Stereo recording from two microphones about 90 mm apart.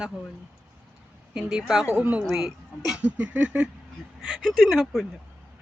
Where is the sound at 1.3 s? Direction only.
5° right (ahead or behind).